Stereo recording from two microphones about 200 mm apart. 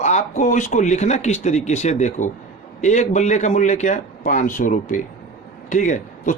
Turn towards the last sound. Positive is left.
turn(degrees=40)  # may be behind; listen again after turning